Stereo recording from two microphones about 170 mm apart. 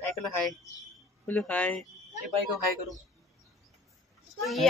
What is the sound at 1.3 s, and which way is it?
Speech, 10° left (ahead or behind).